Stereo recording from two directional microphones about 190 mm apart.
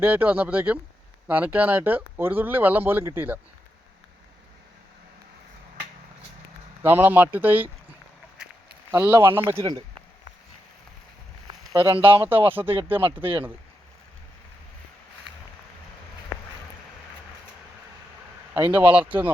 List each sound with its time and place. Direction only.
0.0 s speech: 10° right (ahead or behind)
6.8 s speech: 10° right (ahead or behind)
8.9 s speech: 10° right (ahead or behind)
11.4 s a sound: 15° right (ahead or behind)
11.9 s speech: 30° right (ahead or behind)
12.1 s speech: 10° right (ahead or behind)
18.5 s speech: 10° right (ahead or behind)